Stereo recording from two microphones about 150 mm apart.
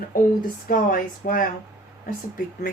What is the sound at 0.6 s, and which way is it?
Speech, 65° left (ahead or behind).